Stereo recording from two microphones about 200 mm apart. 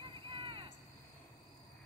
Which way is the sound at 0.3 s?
25° right (ahead or behind).